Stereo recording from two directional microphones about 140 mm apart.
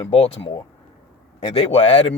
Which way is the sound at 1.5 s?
45° left (ahead or behind).